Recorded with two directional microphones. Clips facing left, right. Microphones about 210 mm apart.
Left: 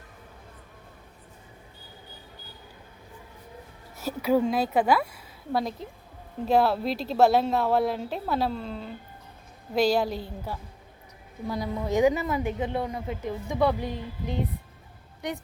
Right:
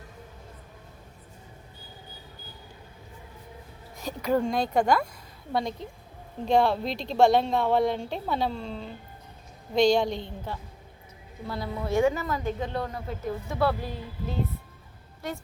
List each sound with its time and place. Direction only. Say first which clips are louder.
3.9 s a woman's voice: left 2 dB; 5° left (ahead or behind)
15.2 s a woman's voice: left 2 dB; 15° left (ahead or behind)